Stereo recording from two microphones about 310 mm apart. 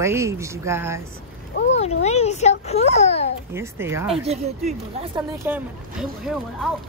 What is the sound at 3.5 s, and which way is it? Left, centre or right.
Speech, centre.